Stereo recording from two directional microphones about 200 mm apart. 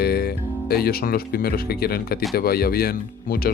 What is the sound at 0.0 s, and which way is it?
Speech, 50° left (ahead or behind).